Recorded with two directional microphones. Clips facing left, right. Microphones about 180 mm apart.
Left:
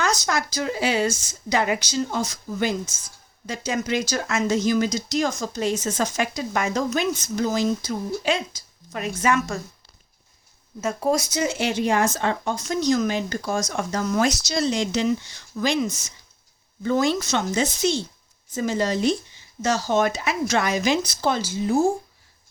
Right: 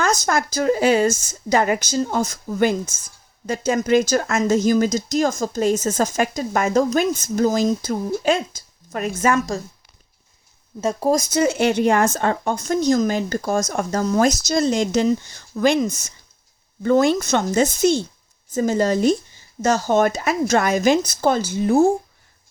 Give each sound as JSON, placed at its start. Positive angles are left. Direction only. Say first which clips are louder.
{"t": 0.0, "sound": "speech", "louder": "right 4 dB", "side_deg": -50}
{"t": 10.8, "sound": "speech", "louder": "right 3 dB", "side_deg": -35}
{"t": 11.3, "sound": "speech", "louder": "right 6 dB", "side_deg": -50}